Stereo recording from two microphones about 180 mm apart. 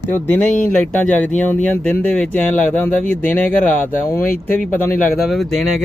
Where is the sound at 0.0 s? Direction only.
10° left (ahead or behind).